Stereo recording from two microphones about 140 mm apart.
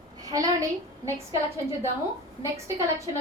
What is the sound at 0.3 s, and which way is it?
Speech, 25° right (ahead or behind).